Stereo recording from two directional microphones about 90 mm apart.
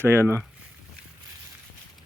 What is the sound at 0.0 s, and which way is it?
Speech, 25° right (ahead or behind).